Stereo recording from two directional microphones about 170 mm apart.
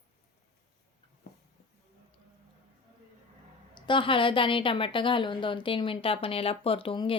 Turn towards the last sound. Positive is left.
turn(degrees=30)  # may be behind; listen again after turning